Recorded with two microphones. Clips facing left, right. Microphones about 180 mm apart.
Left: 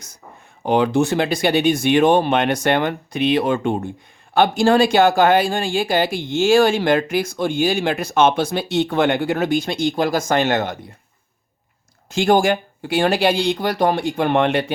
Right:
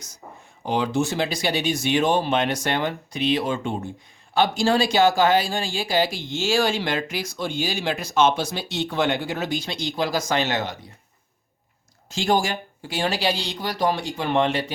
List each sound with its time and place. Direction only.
0.6 s speech: 60° left (ahead or behind)
12.1 s speech: 60° left (ahead or behind)